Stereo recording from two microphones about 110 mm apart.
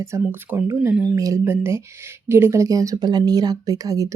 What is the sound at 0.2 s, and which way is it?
Speech, 20° right (ahead or behind).